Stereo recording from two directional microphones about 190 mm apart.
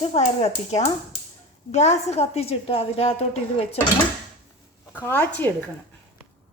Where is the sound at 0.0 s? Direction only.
35° left (ahead or behind).